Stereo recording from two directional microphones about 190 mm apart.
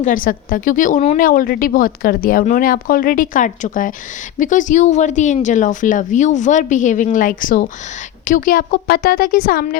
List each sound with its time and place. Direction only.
0.0 s speech: 45° left (ahead or behind)